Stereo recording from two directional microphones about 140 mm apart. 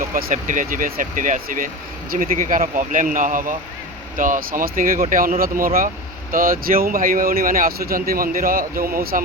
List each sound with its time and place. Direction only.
0.1 s speech: 80° right